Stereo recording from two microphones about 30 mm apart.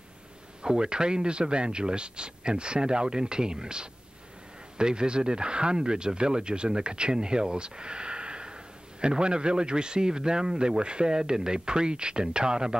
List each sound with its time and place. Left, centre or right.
0.6 s speech: right
10.8 s speech: right